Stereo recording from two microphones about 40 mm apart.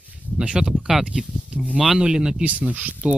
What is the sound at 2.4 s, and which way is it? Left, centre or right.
Speech, right.